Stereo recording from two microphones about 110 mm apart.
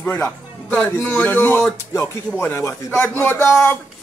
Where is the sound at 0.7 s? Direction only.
15° left (ahead or behind).